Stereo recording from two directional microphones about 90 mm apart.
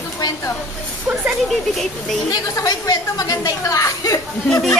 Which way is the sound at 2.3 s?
40° left (ahead or behind).